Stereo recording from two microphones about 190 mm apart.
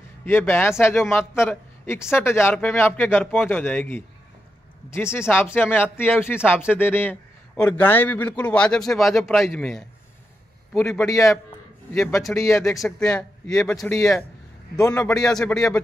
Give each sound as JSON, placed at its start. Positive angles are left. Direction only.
{"t": 0.2, "sound": "a man's voice", "side_deg": 10}
{"t": 12.4, "sound": "a man's voice", "side_deg": 15}
{"t": 12.8, "sound": "speech", "side_deg": 0}
{"t": 13.9, "sound": "a man's voice", "side_deg": 15}
{"t": 15.1, "sound": "speech", "side_deg": 5}